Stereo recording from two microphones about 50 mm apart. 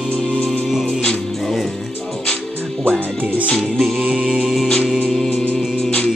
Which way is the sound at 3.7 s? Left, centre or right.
Centre.